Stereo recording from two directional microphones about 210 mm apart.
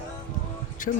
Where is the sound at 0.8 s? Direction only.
40° left (ahead or behind).